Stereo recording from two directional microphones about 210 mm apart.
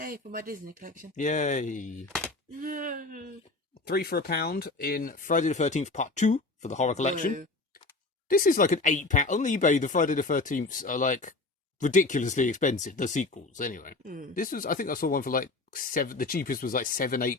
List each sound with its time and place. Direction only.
0.0 s speech: 40° right (ahead or behind)
1.1 s speech: 35° left (ahead or behind)
2.6 s speech: 40° right (ahead or behind)
3.8 s speech: 45° left (ahead or behind)